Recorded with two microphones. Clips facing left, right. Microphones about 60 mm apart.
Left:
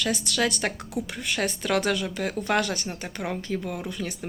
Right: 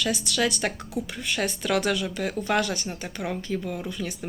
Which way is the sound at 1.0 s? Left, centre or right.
Left.